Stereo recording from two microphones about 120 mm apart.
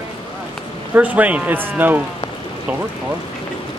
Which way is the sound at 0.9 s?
15° right (ahead or behind).